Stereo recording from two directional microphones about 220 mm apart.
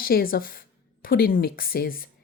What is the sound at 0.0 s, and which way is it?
A woman's voice, 40° left (ahead or behind).